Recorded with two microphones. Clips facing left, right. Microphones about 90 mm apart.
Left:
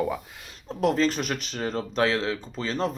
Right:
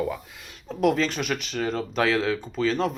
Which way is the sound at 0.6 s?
35° left (ahead or behind).